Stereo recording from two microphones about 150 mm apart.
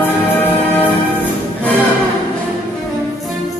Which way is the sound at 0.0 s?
15° left (ahead or behind).